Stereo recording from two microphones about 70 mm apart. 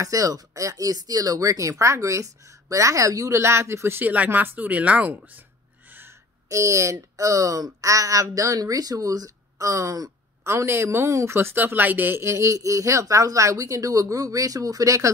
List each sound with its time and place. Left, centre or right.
0.0 s speech: right
5.9 s owl: right
6.5 s speech: right
10.4 s a woman's voice: right
11.3 s speech: right
12.2 s speech: right